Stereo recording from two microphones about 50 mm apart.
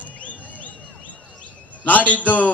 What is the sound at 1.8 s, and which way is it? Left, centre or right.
Speech, left.